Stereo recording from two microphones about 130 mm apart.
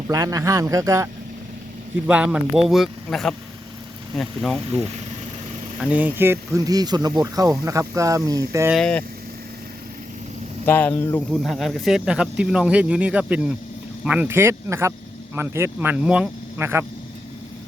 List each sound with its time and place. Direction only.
0.1 s speech: 25° right (ahead or behind)
2.0 s speech: 10° right (ahead or behind)
5.8 s speech: 10° right (ahead or behind)
8.7 s speech: 5° left (ahead or behind)
10.7 s speech: 15° left (ahead or behind)
11.3 s speech: centre (ahead or behind); by 16.8 s 20° right (ahead or behind)